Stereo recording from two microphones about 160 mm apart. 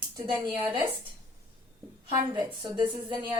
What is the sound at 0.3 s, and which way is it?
Speech, 10° right (ahead or behind).